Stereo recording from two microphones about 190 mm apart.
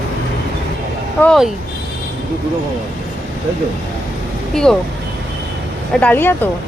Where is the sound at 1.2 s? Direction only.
5° left (ahead or behind).